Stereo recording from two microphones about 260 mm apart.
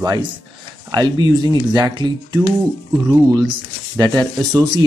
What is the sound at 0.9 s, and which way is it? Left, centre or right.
Speech, centre.